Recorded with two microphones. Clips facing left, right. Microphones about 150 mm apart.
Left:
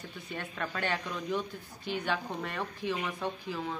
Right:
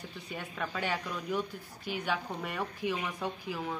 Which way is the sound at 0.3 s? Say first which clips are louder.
Left 1 dB; 10° right (ahead or behind).